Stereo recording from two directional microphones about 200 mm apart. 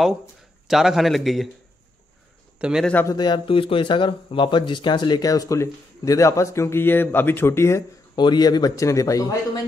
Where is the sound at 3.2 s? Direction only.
25° left (ahead or behind).